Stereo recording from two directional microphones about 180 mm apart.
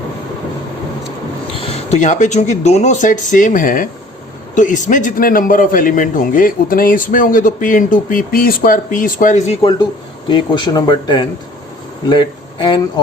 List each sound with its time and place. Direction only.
1.6 s a man's voice: 35° left (ahead or behind)
10.2 s speech: 25° left (ahead or behind)